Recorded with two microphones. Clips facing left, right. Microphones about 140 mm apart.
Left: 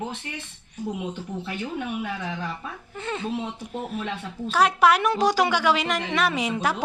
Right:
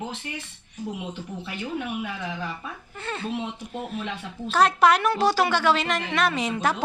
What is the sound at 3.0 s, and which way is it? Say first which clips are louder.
Speech: left 2 dB; 15° left (ahead or behind).